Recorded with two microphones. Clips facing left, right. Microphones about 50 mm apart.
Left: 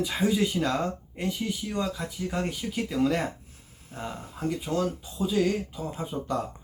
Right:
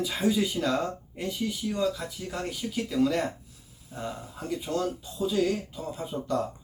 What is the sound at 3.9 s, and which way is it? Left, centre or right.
Speech, left.